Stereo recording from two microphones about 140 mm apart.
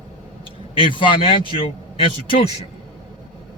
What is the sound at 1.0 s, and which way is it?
A man's voice, 40° left (ahead or behind).